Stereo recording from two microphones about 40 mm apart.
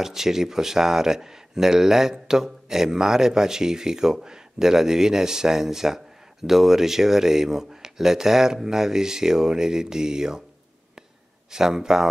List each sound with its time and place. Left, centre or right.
0.0 s speech: centre
11.5 s speech: centre